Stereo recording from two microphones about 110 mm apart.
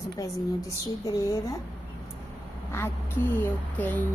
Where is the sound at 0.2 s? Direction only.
30° left (ahead or behind).